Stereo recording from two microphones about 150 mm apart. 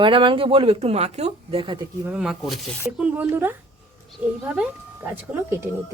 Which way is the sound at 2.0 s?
5° right (ahead or behind).